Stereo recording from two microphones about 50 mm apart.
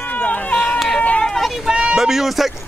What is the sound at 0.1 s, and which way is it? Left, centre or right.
Run, left.